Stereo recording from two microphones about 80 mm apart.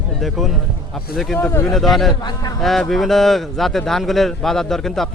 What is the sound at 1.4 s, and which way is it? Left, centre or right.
Speech, left.